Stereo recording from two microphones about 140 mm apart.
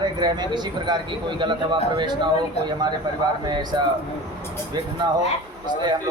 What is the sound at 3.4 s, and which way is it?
Speech, 30° right (ahead or behind).